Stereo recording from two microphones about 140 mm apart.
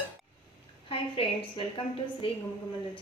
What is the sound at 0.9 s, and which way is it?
Speech, 40° left (ahead or behind).